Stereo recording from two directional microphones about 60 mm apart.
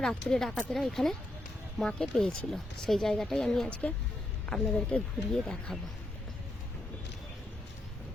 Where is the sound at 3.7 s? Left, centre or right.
Left.